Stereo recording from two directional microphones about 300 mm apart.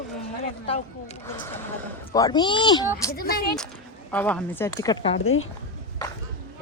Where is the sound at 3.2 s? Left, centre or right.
Left.